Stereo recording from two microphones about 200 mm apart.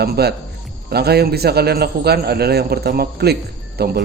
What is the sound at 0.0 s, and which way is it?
A man's voice, 55° right (ahead or behind).